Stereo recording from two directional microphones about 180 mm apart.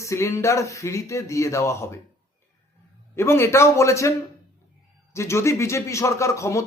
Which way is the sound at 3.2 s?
15° left (ahead or behind).